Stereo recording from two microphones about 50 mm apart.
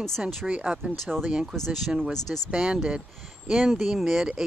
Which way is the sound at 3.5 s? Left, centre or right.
Centre.